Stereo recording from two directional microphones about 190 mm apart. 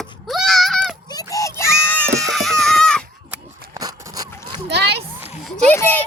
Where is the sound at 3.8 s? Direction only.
20° right (ahead or behind).